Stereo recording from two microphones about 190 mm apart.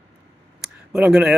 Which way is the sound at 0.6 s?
5° right (ahead or behind).